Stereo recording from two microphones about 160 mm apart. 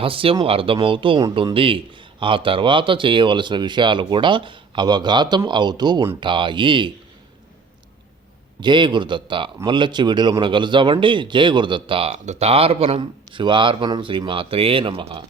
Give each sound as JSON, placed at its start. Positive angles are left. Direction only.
{"t": 0.0, "sound": "speech", "side_deg": -35}
{"t": 8.6, "sound": "speech", "side_deg": -30}